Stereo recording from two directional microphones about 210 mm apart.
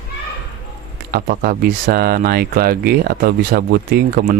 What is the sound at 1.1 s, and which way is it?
Speech, 45° right (ahead or behind).